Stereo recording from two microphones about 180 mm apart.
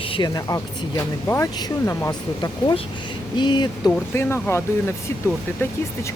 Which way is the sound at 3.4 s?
25° left (ahead or behind).